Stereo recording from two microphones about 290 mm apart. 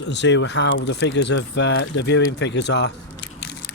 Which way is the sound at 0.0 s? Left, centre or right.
Left.